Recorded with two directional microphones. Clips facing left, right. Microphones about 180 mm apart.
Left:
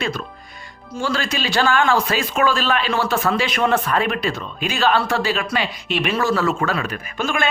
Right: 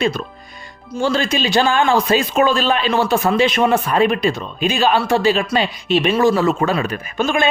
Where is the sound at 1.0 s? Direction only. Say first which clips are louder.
Right 5 dB; 20° right (ahead or behind).